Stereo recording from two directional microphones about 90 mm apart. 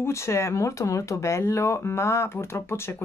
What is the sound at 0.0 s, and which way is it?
Speech, 30° left (ahead or behind).